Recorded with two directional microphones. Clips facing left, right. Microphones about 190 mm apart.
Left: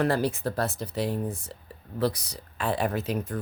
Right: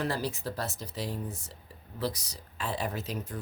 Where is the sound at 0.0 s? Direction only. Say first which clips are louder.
Left 7 dB; 55° left (ahead or behind).